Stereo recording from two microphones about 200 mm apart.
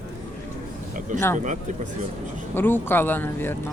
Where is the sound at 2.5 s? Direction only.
10° left (ahead or behind).